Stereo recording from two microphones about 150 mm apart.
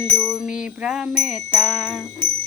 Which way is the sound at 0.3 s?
5° right (ahead or behind).